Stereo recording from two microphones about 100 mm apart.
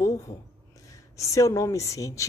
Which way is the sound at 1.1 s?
30° left (ahead or behind).